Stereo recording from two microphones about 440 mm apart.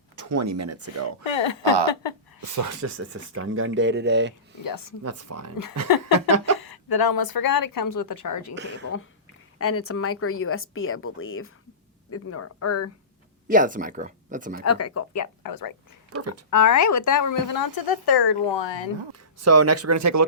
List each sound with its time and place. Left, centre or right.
0.2 s speech: right
1.2 s speech: left
2.4 s speech: right
4.6 s speech: left
5.0 s speech: right
6.0 s a sound: right
6.6 s speech: left
8.5 s speech: right
9.6 s speech: left
13.5 s speech: centre
14.6 s speech: left
16.1 s speech: right
16.5 s speech: left
19.4 s speech: right